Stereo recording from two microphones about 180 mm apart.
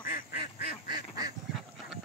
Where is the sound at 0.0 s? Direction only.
50° left (ahead or behind).